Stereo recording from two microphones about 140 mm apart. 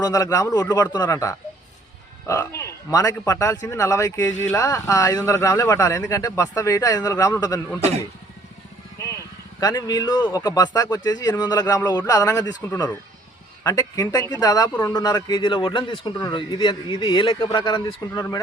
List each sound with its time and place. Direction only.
0.0 s speech: 25° left (ahead or behind)
9.0 s speech: 25° left (ahead or behind)